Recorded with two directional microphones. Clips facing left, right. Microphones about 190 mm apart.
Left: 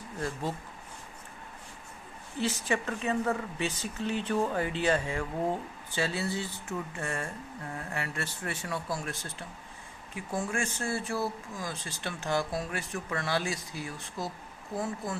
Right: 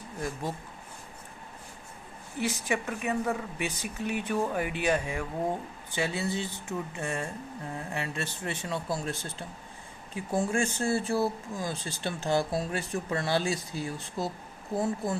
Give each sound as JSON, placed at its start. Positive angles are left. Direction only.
{"t": 0.2, "sound": "speech", "side_deg": -15}
{"t": 2.4, "sound": "speech", "side_deg": -15}